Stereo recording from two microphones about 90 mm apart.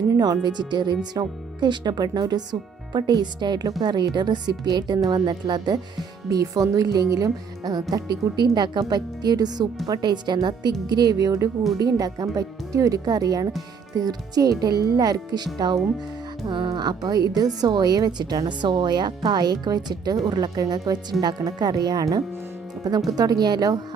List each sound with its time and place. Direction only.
0.4 s a woman's voice: 55° right (ahead or behind)
16.5 s a woman's voice: 65° right (ahead or behind); by 23.8 s 45° right (ahead or behind)